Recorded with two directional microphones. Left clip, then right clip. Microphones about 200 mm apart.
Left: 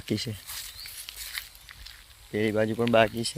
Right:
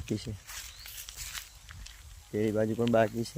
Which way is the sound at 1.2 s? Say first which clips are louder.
Left 5 dB; 20° left (ahead or behind).